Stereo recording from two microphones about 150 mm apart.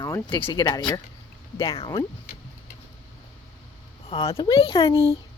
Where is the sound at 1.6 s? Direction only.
40° left (ahead or behind).